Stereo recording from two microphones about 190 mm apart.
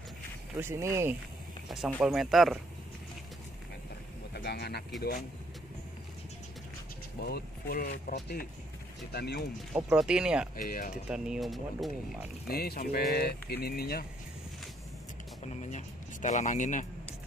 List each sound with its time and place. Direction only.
0.6 s speech: 15° right (ahead or behind)
2.0 s speech: centre (ahead or behind)
4.3 s speech: 60° left (ahead or behind)
7.2 s speech: 55° left (ahead or behind)
9.8 s speech: 5° right (ahead or behind)
10.5 s speech: 45° left (ahead or behind)
11.1 s speech: 5° right (ahead or behind)
12.4 s speech: 55° left (ahead or behind)
15.4 s a sound: 40° left (ahead or behind)